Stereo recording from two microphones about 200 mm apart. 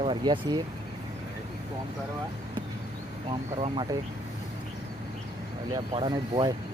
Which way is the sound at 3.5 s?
25° right (ahead or behind).